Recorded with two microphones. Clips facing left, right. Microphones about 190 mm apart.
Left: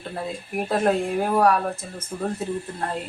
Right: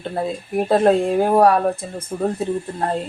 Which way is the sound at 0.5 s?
30° right (ahead or behind).